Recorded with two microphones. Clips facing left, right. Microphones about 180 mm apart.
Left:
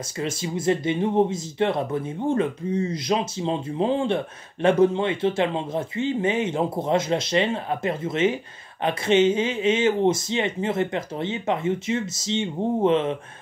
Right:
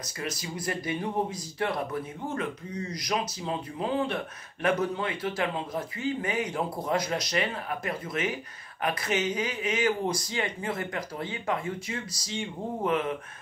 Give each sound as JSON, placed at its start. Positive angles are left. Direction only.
{"t": 0.2, "sound": "speech", "side_deg": 25}